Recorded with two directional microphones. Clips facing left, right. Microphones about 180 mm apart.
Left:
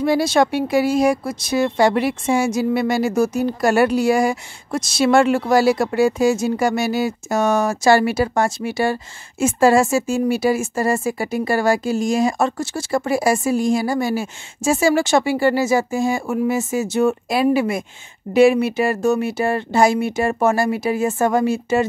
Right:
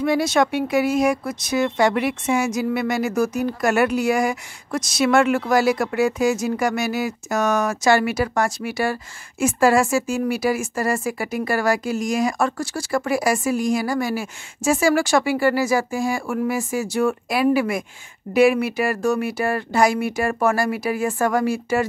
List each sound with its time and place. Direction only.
0.0 s speech: 30° left (ahead or behind)